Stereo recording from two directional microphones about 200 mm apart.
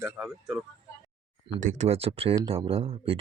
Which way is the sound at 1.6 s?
35° right (ahead or behind).